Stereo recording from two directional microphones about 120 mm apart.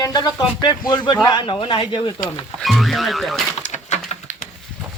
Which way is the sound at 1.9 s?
35° left (ahead or behind).